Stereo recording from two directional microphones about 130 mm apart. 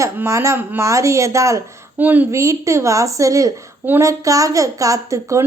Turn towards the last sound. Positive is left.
turn(degrees=-25)  # may be behind; listen again after turning